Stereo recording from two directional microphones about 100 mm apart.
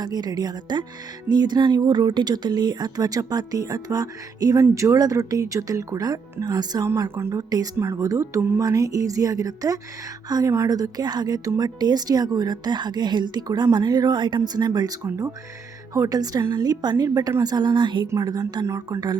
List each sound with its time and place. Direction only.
0.0 s a woman's voice: 40° right (ahead or behind); by 8.5 s 25° right (ahead or behind)
8.5 s a woman's voice: 35° right (ahead or behind)
16.0 s a woman's voice: 40° right (ahead or behind)
18.1 s speech: 35° right (ahead or behind)